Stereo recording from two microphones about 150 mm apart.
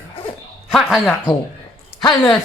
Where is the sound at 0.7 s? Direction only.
Centre (ahead or behind).